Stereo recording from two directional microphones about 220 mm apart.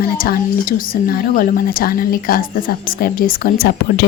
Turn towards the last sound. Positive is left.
turn(degrees=45)  # may be behind; listen again after turning